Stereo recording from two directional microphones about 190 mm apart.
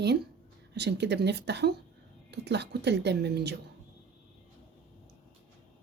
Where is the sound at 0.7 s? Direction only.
60° right (ahead or behind).